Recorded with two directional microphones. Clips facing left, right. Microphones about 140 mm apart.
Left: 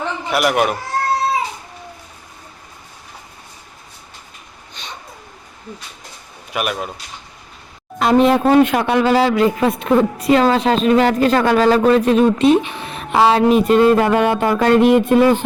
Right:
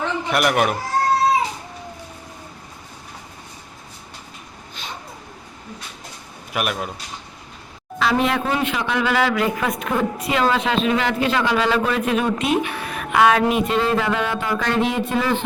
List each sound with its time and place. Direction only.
0.3 s speech: centre (ahead or behind)
6.5 s speech: centre (ahead or behind)
8.0 s a woman's voice: 40° left (ahead or behind)
8.5 s a man's voice: 50° left (ahead or behind)
9.0 s a woman's voice: 30° left (ahead or behind); by 15.4 s 45° left (ahead or behind)